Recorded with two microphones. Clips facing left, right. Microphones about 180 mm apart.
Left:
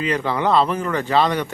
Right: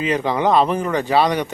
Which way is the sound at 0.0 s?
15° right (ahead or behind).